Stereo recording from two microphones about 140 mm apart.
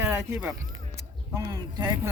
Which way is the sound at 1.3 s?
25° right (ahead or behind).